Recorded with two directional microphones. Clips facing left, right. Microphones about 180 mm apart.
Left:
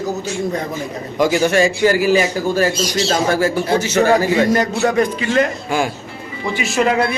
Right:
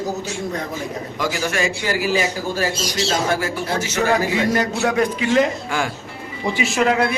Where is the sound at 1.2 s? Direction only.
25° left (ahead or behind).